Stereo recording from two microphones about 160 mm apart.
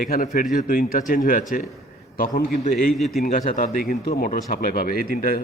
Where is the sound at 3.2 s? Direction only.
55° left (ahead or behind).